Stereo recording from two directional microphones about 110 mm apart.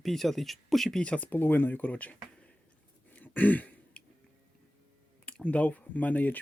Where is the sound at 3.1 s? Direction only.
15° left (ahead or behind).